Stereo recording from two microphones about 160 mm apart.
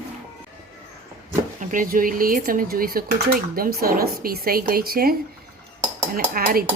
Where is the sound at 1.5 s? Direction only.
55° right (ahead or behind).